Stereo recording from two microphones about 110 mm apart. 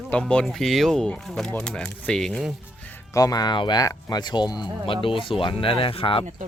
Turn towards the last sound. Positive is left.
turn(degrees=55)  # may be behind; listen again after turning